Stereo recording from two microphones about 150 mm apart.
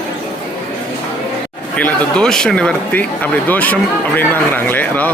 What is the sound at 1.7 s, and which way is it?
Speech, 10° left (ahead or behind).